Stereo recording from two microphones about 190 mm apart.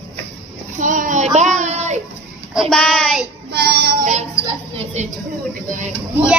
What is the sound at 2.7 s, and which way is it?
Speech, 5° left (ahead or behind).